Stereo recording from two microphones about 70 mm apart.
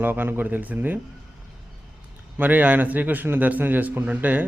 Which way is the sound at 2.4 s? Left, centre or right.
Right.